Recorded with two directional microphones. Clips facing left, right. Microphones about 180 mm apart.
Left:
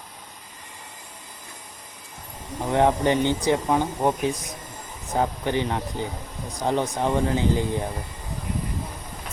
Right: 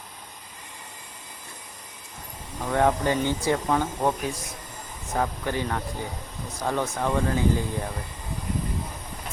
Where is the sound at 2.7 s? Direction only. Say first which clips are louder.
Left 2 dB; 20° left (ahead or behind).